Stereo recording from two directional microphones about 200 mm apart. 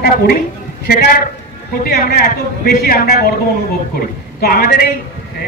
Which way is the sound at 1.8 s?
50° left (ahead or behind).